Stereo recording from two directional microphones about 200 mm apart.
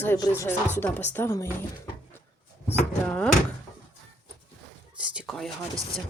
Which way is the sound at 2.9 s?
5° left (ahead or behind).